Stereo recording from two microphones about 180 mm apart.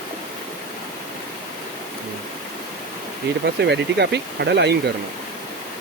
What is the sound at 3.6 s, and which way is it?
Speech, 70° right (ahead or behind).